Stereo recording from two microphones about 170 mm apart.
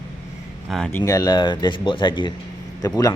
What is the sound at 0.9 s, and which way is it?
Speech, 20° left (ahead or behind).